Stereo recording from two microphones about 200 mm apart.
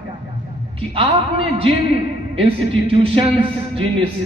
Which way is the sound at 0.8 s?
30° right (ahead or behind).